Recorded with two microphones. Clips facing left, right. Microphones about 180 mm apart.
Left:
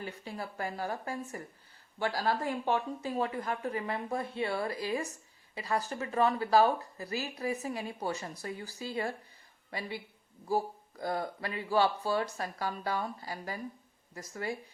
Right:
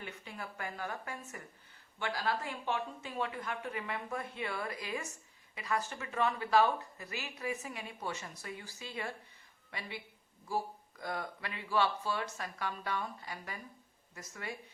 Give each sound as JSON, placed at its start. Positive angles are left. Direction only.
{"t": 0.0, "sound": "speech", "side_deg": 35}